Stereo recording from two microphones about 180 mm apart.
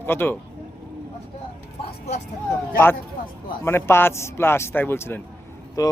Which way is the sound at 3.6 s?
15° left (ahead or behind).